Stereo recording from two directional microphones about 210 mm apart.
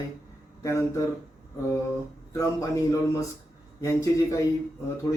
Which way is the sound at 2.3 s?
15° left (ahead or behind).